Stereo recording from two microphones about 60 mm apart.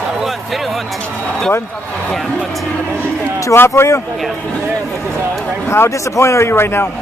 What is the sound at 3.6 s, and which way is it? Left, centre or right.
Speech, left.